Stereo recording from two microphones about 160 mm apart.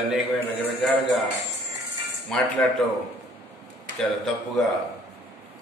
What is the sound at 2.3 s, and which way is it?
Speech, 5° left (ahead or behind).